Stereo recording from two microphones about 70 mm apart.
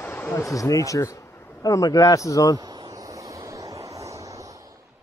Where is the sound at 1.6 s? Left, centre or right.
Left.